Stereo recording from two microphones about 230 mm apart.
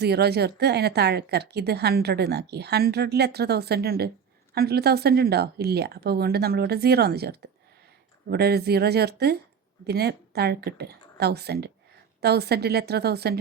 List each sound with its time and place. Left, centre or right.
0.0 s a woman's voice: right